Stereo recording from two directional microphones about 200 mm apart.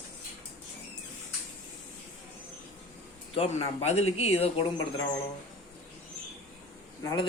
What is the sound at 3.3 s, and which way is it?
Speech, 30° left (ahead or behind).